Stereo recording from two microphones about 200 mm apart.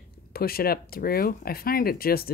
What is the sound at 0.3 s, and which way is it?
Speech, 50° left (ahead or behind).